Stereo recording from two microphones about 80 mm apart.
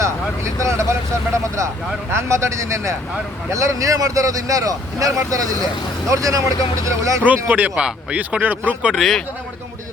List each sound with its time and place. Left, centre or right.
0.0 s speech: right
7.3 s speech: right
9.0 s a man's voice: centre